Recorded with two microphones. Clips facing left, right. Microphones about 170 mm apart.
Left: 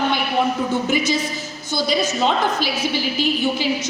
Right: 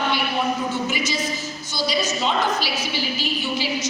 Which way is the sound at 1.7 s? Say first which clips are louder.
Left 4 dB; 55° left (ahead or behind).